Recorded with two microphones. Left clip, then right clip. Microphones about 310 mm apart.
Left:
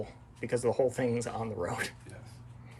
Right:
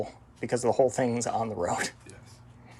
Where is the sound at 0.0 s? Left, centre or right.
Centre.